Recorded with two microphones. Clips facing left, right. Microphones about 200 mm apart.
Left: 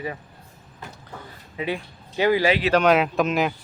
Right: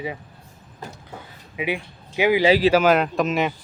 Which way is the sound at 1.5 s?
10° right (ahead or behind).